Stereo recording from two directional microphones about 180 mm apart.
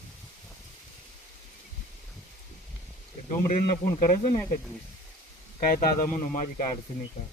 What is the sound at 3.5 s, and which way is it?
Speech, 50° left (ahead or behind).